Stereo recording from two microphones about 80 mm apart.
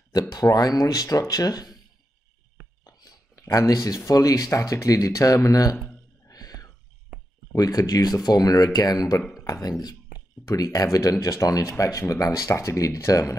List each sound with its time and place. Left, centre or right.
0.3 s speech: left
2.8 s a sound: left
4.5 s speech: left
6.2 s music: left
7.5 s speech: left